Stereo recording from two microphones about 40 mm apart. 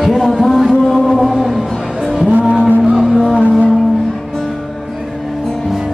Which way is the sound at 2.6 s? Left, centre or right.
Centre.